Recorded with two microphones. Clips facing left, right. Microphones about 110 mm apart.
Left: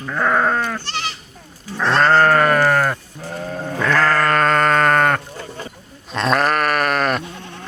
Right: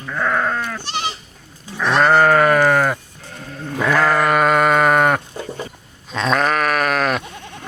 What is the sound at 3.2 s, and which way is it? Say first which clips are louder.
Sheep: left 5 dB; 45° left (ahead or behind).